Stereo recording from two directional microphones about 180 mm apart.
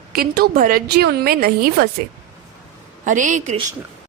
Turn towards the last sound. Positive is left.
turn(degrees=-40)  # may be behind; listen again after turning